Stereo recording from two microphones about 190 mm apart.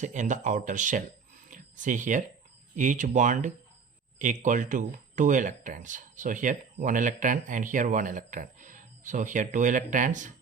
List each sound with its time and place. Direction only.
0.0 s speech: 40° right (ahead or behind)
1.5 s a sound: 40° right (ahead or behind)
2.7 s speech: 40° right (ahead or behind)